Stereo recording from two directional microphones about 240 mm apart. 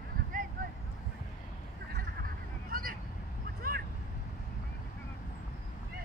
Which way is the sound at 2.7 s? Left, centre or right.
Right.